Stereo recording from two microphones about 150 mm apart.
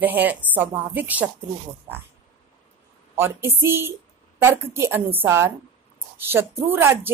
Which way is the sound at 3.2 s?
15° right (ahead or behind).